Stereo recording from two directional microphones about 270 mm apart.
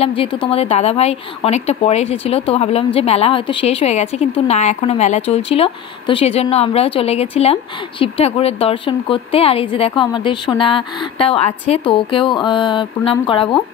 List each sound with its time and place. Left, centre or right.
0.0 s speech: centre
11.9 s a sound: centre
13.3 s speech: centre